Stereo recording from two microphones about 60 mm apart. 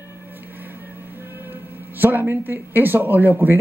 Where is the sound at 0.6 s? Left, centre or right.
Right.